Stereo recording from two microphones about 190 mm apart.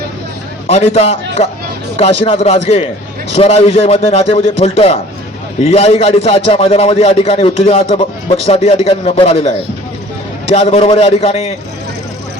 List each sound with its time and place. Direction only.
0.7 s a man's voice: 35° left (ahead or behind)
10.5 s a man's voice: 30° left (ahead or behind)